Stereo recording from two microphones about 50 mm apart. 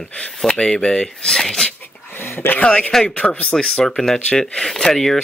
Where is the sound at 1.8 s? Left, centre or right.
Left.